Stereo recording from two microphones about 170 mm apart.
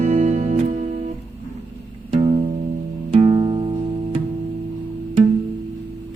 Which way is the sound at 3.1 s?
35° right (ahead or behind).